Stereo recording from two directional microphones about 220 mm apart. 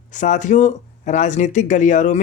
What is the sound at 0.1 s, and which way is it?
Speech, 35° left (ahead or behind).